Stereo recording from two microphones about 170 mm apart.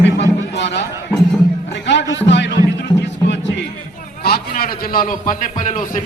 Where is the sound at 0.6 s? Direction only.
90° left.